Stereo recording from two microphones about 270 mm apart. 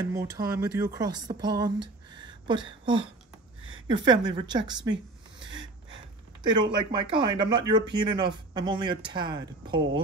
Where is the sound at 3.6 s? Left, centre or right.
Right.